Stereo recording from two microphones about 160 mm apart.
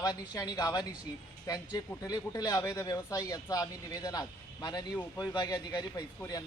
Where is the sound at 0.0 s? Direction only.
20° left (ahead or behind).